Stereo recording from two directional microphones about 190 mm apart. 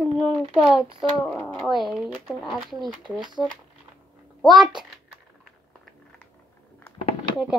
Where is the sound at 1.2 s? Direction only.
10° left (ahead or behind).